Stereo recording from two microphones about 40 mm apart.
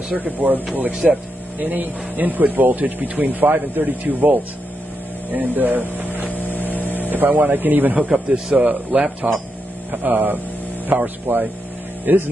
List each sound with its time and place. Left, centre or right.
0.1 s speech: right
1.0 s speech: centre
1.6 s speech: right
6.3 s vehicle: left
6.7 s mains hum: left
7.1 s speech: right
8.5 s speech: centre
9.2 s speech: right
9.8 s speech: right
12.1 s speech: right